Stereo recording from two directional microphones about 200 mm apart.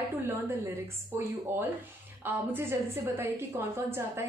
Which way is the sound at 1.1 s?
10° right (ahead or behind).